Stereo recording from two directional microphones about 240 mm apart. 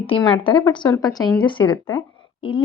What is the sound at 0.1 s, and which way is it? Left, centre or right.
Speech, left.